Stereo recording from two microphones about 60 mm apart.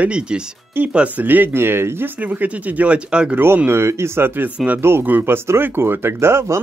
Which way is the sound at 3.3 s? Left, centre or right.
Right.